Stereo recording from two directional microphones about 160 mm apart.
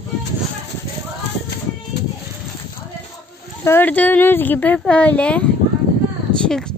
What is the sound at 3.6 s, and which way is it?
Speech, 10° left (ahead or behind).